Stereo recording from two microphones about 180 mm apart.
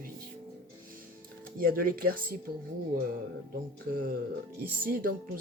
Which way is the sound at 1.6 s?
55° right (ahead or behind).